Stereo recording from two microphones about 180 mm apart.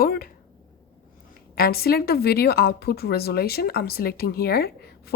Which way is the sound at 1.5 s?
55° left (ahead or behind).